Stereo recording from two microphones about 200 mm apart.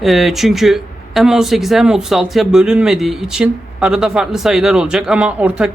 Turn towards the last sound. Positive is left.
turn(degrees=-5)  # may be behind; listen again after turning